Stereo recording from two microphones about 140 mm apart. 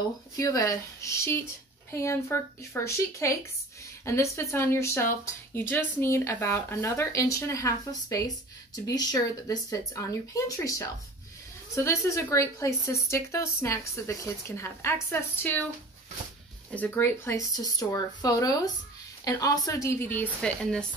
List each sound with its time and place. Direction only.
0.4 s speech: 25° left (ahead or behind)
16.7 s speech: 10° left (ahead or behind)